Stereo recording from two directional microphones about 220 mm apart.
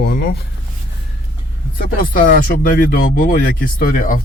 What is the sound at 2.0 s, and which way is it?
Speech, 40° left (ahead or behind).